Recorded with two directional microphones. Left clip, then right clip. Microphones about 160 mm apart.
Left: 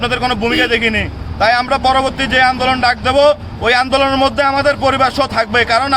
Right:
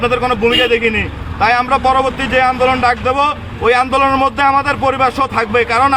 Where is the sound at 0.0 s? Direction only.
40° left (ahead or behind).